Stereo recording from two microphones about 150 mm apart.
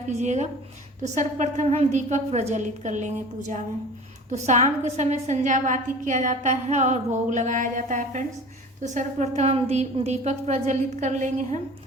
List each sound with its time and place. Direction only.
0.2 s a woman's voice: 50° right (ahead or behind)
4.3 s a woman's voice: 50° right (ahead or behind)